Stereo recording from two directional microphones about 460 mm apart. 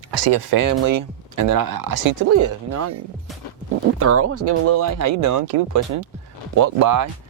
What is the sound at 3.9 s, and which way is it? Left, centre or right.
Speech, right.